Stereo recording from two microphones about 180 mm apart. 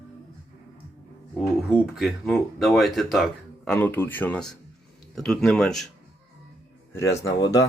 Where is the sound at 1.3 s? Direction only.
Centre (ahead or behind).